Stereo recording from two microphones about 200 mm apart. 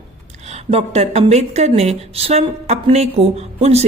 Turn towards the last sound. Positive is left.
turn(degrees=-30)  # may be behind; listen again after turning